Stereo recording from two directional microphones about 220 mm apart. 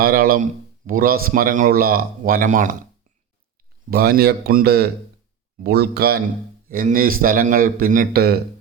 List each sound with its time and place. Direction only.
0.0 s speech: 45° right (ahead or behind)
3.8 s speech: 45° right (ahead or behind)